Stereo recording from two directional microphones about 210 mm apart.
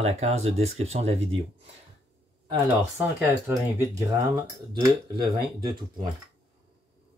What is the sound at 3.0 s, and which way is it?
Speech, 10° right (ahead or behind).